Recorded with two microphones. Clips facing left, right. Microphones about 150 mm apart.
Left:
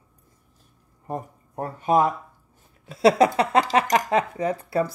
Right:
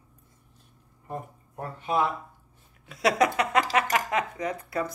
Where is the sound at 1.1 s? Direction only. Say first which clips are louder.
Left 5 dB; 40° left (ahead or behind).